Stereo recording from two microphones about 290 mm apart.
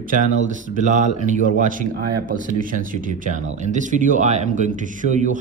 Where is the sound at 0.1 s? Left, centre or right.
Right.